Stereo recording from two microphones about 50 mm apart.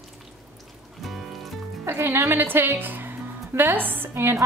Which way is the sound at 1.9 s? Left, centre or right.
Right.